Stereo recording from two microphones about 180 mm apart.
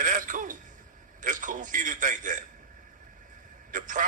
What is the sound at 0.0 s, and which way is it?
Throat clearing, 45° right (ahead or behind).